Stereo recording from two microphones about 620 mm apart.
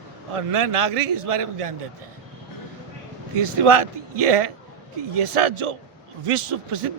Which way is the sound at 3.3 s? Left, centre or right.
Right.